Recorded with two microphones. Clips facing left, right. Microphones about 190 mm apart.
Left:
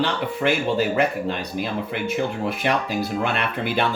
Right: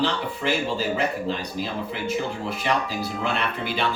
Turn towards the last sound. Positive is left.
turn(degrees=55)  # may be behind; listen again after turning